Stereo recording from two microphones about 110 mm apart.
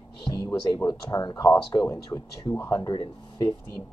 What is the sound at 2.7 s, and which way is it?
Speech, 40° left (ahead or behind).